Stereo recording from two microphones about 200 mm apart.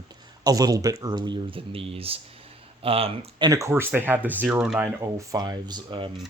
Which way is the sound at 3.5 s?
15° right (ahead or behind).